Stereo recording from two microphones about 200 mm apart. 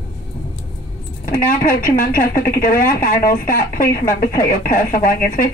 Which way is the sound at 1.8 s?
45° left (ahead or behind).